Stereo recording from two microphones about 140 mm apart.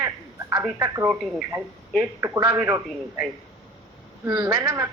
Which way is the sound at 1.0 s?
10° right (ahead or behind).